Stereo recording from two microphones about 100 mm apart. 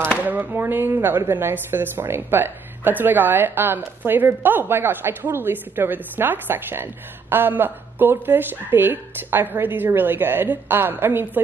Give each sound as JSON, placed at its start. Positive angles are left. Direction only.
{"t": 0.2, "sound": "speech", "side_deg": -15}